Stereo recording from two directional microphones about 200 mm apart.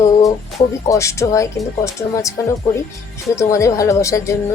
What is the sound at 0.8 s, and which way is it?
Speech, 15° left (ahead or behind).